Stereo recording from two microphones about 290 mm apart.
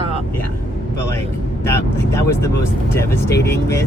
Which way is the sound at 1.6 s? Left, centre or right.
Centre.